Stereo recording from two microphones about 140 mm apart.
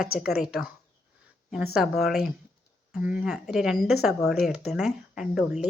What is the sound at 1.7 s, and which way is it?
Speech, centre (ahead or behind).